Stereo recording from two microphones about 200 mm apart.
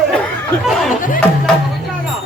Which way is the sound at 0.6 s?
Centre (ahead or behind).